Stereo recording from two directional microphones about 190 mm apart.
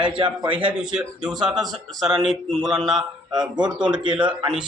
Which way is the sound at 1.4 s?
Centre (ahead or behind).